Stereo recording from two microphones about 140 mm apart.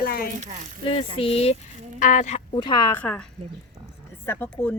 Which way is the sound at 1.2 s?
45° left (ahead or behind).